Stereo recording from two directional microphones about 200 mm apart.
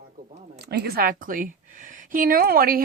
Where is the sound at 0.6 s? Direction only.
55° right (ahead or behind).